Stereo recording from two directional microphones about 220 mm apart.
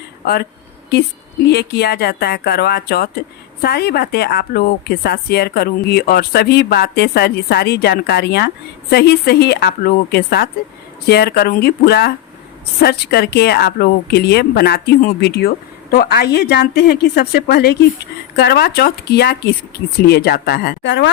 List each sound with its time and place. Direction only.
1.5 s a woman's voice: 50° left (ahead or behind)